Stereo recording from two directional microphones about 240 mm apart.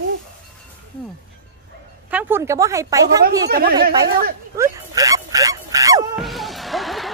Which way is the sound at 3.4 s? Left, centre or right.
Right.